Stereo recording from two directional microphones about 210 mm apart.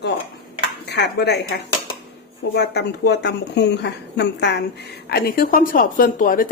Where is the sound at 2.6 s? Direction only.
55° left (ahead or behind).